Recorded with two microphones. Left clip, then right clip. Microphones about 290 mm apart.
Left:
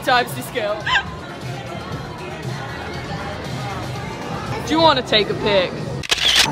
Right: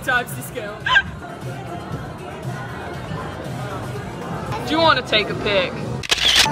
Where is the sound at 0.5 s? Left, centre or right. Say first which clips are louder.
Right 1 dB; centre.